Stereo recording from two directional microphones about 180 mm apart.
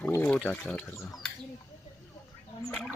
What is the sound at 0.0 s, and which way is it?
Speech, 10° left (ahead or behind).